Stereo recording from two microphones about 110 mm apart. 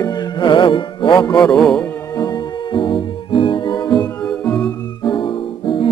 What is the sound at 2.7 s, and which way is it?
Music, 50° left (ahead or behind).